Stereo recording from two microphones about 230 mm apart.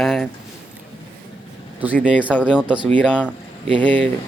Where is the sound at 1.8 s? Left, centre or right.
Centre.